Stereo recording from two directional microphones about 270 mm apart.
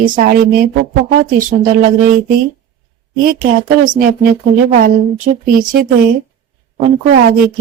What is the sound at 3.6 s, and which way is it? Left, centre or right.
A woman's voice, right.